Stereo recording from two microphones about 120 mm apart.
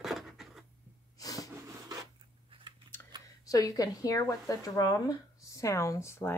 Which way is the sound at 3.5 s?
30° left (ahead or behind).